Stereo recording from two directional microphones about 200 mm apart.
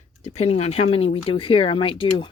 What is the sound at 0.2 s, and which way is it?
Speech, 30° left (ahead or behind).